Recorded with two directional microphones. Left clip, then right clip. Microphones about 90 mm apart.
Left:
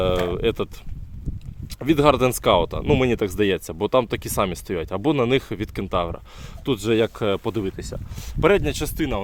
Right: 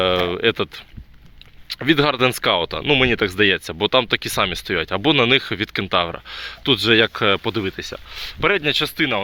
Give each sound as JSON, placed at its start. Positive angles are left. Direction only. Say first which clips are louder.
{"t": 0.0, "sound": "speech", "louder": "right 4 dB", "side_deg": 25}
{"t": 1.7, "sound": "speech", "louder": "even", "side_deg": 30}
{"t": 4.4, "sound": "speech", "louder": "right 5 dB", "side_deg": 30}
{"t": 5.8, "sound": "speech", "louder": "right 3 dB", "side_deg": 25}